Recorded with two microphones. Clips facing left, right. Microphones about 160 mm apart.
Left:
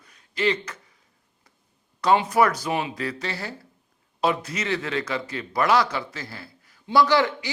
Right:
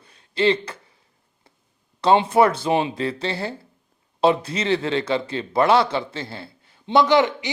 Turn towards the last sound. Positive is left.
turn(degrees=-20)  # may be behind; listen again after turning